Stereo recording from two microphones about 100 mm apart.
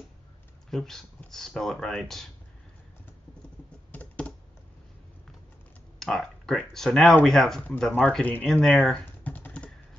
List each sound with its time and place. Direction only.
0.7 s speech: 5° left (ahead or behind)
3.9 s computer keyboard: 15° left (ahead or behind)
5.9 s speech: 5° left (ahead or behind)
9.2 s typing: 15° left (ahead or behind)